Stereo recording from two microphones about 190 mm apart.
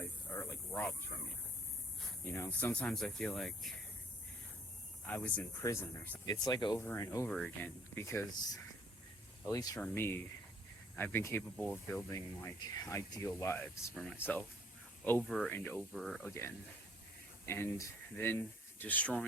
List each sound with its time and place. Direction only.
0.0 s snake: 15° left (ahead or behind)
2.3 s speech: 10° left (ahead or behind)
5.0 s speech: 10° left (ahead or behind)
9.5 s speech: 20° left (ahead or behind); by 16.2 s centre (ahead or behind)
16.2 s speech: 15° left (ahead or behind)